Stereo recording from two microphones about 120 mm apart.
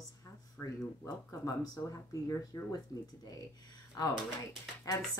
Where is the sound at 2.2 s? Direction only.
30° left (ahead or behind).